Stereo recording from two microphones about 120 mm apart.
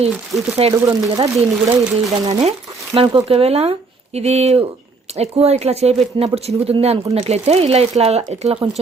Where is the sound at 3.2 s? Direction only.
60° right (ahead or behind).